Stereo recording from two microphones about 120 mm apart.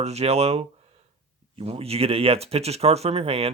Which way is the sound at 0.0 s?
60° right (ahead or behind).